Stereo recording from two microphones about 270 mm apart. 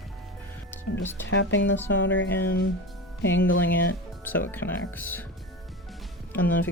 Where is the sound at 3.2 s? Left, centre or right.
Left.